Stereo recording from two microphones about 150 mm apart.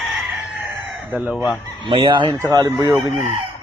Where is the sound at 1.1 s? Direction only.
10° right (ahead or behind).